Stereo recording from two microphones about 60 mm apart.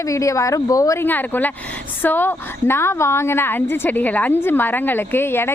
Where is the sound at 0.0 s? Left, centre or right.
Left.